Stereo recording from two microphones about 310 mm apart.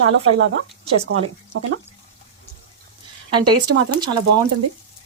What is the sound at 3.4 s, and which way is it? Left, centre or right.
Speech, right.